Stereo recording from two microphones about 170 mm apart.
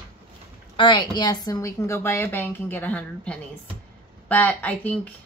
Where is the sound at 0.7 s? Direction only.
25° left (ahead or behind); by 5.1 s 10° left (ahead or behind).